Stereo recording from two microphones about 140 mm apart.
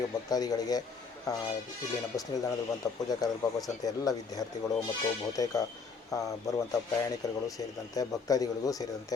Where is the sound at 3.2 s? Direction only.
25° left (ahead or behind).